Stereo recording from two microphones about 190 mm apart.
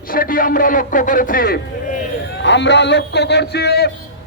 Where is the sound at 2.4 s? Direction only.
65° left (ahead or behind).